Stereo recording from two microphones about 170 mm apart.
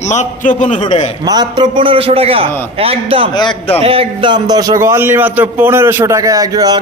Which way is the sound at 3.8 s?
35° right (ahead or behind).